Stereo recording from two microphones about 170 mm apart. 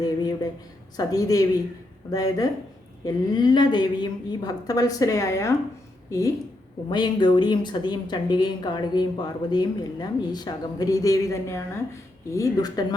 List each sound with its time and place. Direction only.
0.9 s a woman's voice: 20° left (ahead or behind)